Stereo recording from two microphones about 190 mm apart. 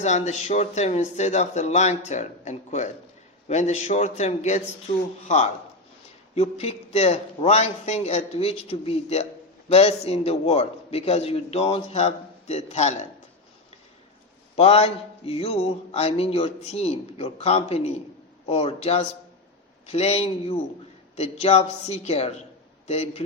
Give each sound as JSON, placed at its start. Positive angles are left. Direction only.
{"t": 0.0, "sound": "a man's voice", "side_deg": 35}
{"t": 6.3, "sound": "a man's voice", "side_deg": 35}
{"t": 14.5, "sound": "a man's voice", "side_deg": 35}